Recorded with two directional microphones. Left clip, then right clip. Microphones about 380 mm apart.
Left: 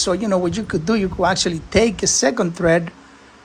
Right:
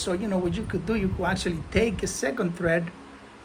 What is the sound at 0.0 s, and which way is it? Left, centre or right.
Speech, centre.